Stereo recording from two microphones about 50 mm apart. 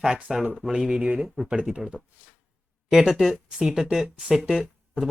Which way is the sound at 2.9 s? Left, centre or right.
Centre.